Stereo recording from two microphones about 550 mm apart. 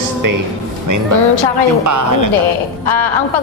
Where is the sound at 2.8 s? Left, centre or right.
Left.